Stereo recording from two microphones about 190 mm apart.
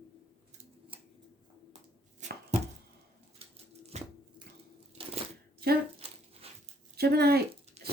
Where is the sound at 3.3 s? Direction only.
30° right (ahead or behind).